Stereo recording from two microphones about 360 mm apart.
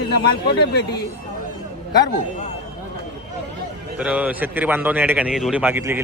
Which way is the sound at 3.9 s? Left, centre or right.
Centre.